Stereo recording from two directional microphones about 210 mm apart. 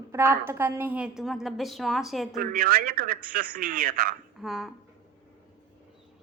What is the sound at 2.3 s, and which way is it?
A man's voice, 40° right (ahead or behind).